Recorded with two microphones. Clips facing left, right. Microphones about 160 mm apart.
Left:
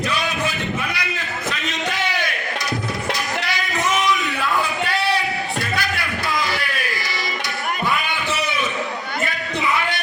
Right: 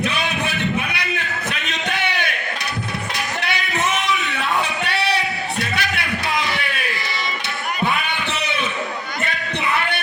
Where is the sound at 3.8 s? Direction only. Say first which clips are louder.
Left 3 dB; 65° right (ahead or behind).